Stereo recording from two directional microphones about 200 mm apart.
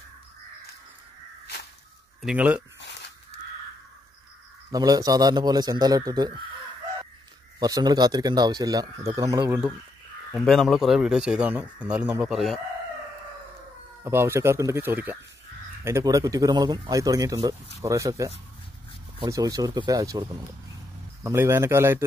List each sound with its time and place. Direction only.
2.2 s speech: 5° right (ahead or behind)
2.8 s goose: 60° left (ahead or behind)
4.6 s a man's voice: 20° right (ahead or behind)
7.5 s a man's voice: 20° right (ahead or behind)
10.3 s speech: centre (ahead or behind)
14.0 s a man's voice: 15° right (ahead or behind)